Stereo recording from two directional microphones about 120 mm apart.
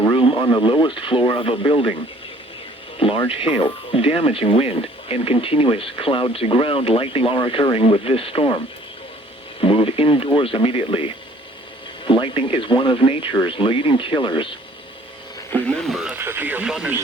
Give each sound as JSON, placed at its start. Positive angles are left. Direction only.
{"t": 0.1, "sound": "speech", "side_deg": 35}
{"t": 3.2, "sound": "speech", "side_deg": 50}
{"t": 9.6, "sound": "speech", "side_deg": 50}
{"t": 15.9, "sound": "speech", "side_deg": -5}
{"t": 16.1, "sound": "speech", "side_deg": -20}
{"t": 16.6, "sound": "speech", "side_deg": -5}